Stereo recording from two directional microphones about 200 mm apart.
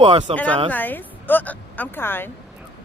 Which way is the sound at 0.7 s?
10° left (ahead or behind).